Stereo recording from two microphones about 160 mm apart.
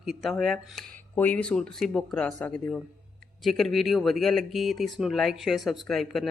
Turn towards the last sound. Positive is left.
turn(degrees=0)  # may be behind; listen again after turning